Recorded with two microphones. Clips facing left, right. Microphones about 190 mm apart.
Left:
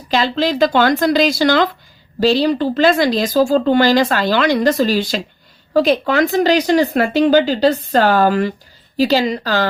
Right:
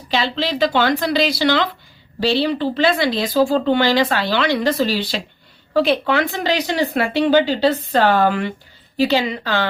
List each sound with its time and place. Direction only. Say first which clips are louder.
0.1 s speech: left 4 dB; 45° left (ahead or behind)